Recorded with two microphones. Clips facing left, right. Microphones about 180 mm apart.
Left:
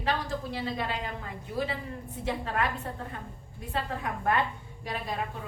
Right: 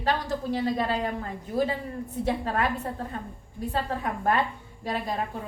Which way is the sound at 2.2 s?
35° right (ahead or behind).